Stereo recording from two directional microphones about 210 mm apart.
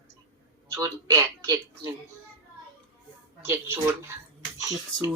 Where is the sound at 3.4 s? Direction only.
10° right (ahead or behind).